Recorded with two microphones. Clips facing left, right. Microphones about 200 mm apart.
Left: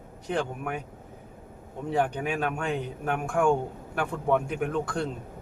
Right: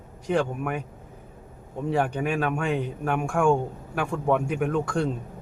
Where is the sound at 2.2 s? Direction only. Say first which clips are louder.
Right 3 dB; 5° left (ahead or behind).